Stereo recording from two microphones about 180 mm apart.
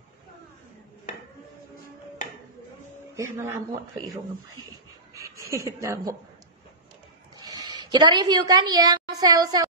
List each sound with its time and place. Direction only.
3.2 s speech: 15° right (ahead or behind)
5.1 s speech: 15° right (ahead or behind)
7.3 s a woman's voice: 20° right (ahead or behind)